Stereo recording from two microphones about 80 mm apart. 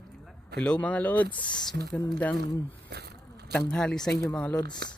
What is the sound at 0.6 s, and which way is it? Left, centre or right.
Speech, centre.